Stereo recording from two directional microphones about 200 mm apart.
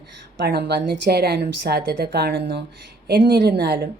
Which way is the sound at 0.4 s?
55° right (ahead or behind).